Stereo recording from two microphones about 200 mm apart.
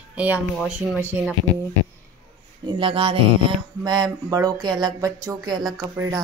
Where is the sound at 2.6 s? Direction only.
25° right (ahead or behind).